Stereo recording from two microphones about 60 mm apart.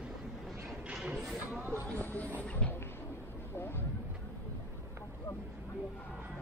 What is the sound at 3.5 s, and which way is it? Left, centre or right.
Speech, left.